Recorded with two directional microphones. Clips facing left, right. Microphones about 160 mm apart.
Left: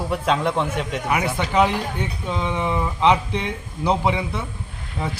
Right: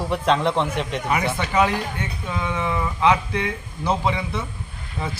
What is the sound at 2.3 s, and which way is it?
Speech, 25° left (ahead or behind).